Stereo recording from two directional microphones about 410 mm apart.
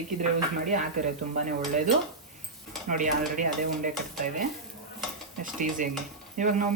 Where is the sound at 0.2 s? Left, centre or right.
Centre.